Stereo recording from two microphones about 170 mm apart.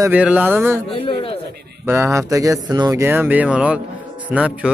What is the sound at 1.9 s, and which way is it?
Speech, 15° right (ahead or behind).